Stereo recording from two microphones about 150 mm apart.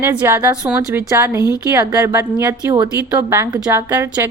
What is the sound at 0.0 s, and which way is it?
A woman's voice, 15° right (ahead or behind).